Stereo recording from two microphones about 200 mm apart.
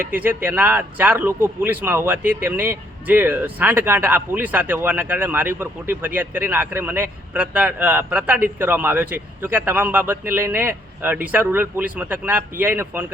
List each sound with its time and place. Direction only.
0.0 s a man's voice: 10° right (ahead or behind)